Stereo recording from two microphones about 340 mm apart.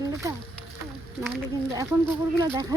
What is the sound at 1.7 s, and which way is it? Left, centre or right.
Speech, centre.